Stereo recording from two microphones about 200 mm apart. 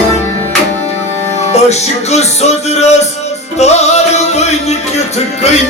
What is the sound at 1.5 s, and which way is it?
Music, 35° left (ahead or behind).